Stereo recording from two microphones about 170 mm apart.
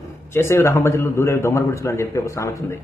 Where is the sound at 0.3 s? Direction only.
15° left (ahead or behind).